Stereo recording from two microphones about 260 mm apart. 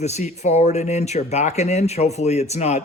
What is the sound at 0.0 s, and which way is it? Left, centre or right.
Speech, left.